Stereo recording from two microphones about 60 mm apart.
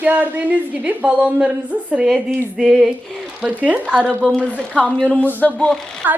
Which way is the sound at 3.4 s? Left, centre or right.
Centre.